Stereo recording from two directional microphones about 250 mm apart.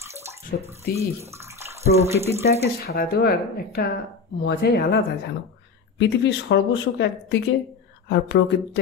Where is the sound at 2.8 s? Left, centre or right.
Left.